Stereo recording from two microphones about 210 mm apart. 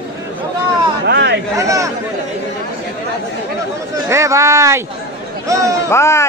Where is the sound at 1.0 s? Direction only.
55° right (ahead or behind).